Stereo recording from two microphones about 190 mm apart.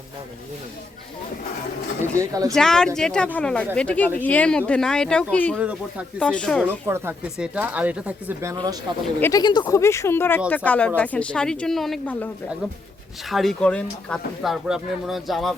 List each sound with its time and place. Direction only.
2.1 s speech: 20° right (ahead or behind)
2.5 s speech: 5° left (ahead or behind)
5.5 s speech: 5° right (ahead or behind)
6.1 s speech: 5° left (ahead or behind)
6.8 s speech: 10° right (ahead or behind)
9.2 s speech: 20° left (ahead or behind); by 15.5 s centre (ahead or behind)